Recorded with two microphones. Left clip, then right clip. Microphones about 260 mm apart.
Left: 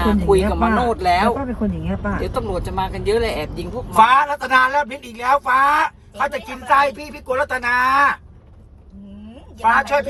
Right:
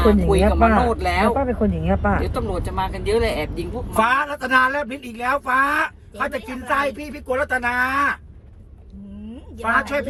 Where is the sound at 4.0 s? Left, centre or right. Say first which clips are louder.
Left 6 dB; left.